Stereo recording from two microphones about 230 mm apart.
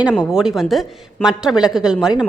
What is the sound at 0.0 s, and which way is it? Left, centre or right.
Speech, centre.